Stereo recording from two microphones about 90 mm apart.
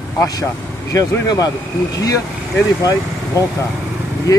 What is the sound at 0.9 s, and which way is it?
Speech, 40° left (ahead or behind).